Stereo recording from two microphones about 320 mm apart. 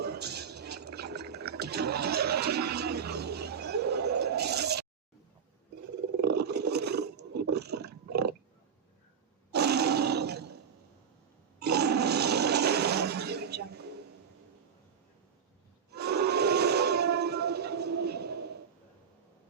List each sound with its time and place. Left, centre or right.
0.0 s fill: right
6.2 s vehicle: right
7.5 s a sound: right
9.5 s roar: right
11.6 s toilet flush: right
15.9 s a sound: right